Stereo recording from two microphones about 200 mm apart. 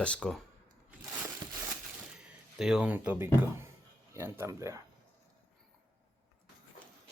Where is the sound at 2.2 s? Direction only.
5° right (ahead or behind).